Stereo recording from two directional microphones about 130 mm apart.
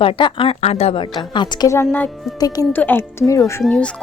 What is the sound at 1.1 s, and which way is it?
Speech, 30° left (ahead or behind).